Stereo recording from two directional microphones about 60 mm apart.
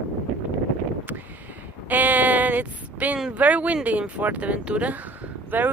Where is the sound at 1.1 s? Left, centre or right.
Right.